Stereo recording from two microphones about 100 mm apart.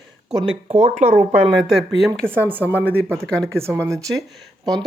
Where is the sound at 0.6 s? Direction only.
90° right.